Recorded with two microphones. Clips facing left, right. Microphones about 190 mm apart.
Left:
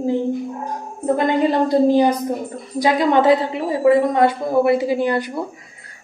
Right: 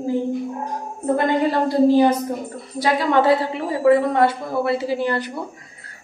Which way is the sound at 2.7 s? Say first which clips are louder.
Left 2 dB; 20° left (ahead or behind).